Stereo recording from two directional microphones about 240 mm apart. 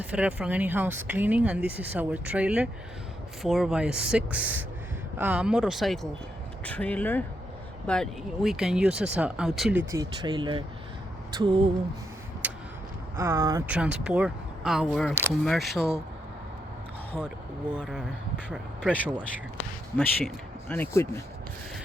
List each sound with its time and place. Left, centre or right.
0.0 s speech: centre
9.9 s speech: centre
11.3 s a sound: centre
12.4 s vehicle: centre
13.1 s speech: centre
17.2 s speech: centre
20.0 s speech: centre